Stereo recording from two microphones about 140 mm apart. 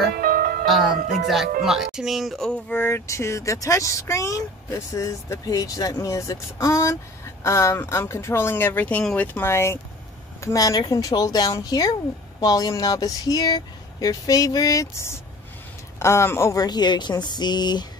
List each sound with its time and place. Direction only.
0.1 s music: 90° right
0.7 s speech: centre (ahead or behind)
2.7 s speech: 15° left (ahead or behind)